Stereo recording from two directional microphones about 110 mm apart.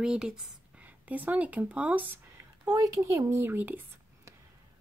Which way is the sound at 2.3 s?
35° right (ahead or behind).